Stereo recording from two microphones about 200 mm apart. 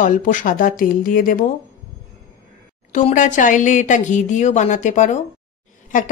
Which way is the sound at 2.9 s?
40° left (ahead or behind).